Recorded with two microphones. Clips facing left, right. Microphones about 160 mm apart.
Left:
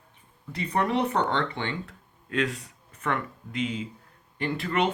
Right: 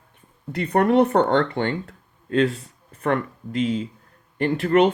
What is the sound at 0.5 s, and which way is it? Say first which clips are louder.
Speech: right 8 dB; 55° right (ahead or behind).